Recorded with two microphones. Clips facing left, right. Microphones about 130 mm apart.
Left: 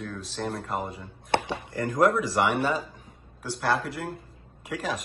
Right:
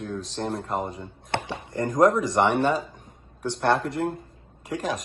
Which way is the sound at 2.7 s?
Centre (ahead or behind).